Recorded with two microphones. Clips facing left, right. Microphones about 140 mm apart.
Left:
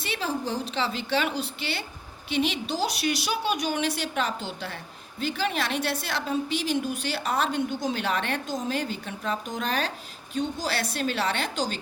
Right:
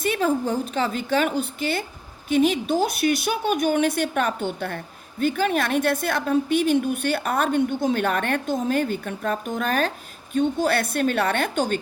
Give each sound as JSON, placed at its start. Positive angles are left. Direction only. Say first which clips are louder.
{"t": 0.0, "sound": "a woman's voice", "louder": "right 8 dB", "side_deg": -50}